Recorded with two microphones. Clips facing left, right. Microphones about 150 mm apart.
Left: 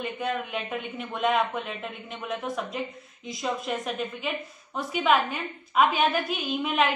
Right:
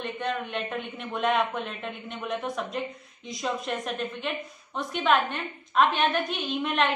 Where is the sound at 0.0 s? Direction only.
5° left (ahead or behind).